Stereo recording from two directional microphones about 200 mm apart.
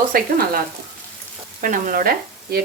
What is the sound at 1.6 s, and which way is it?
Frying, 45° right (ahead or behind).